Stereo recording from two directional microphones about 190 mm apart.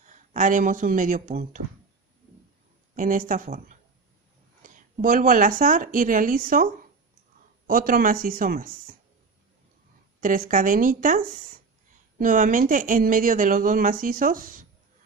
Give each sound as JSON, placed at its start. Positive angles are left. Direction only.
{"t": 0.0, "sound": "speech", "side_deg": -40}
{"t": 3.0, "sound": "speech", "side_deg": -45}
{"t": 10.2, "sound": "speech", "side_deg": -45}